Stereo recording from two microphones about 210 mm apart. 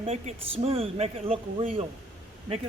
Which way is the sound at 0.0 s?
30° right (ahead or behind).